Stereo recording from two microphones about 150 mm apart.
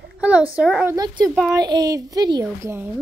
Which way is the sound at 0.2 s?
10° right (ahead or behind).